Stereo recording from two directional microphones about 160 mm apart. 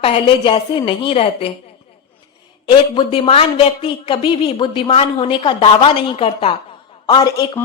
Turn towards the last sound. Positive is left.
turn(degrees=25)  # may be behind; listen again after turning